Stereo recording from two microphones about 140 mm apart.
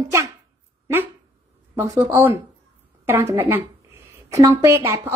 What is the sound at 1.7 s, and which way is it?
A woman's voice, 20° right (ahead or behind).